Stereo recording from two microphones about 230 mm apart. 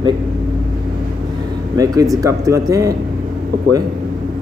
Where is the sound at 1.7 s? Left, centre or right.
Centre.